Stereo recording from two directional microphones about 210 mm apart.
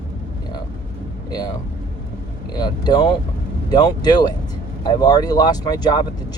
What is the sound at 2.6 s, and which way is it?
Speech, 20° left (ahead or behind).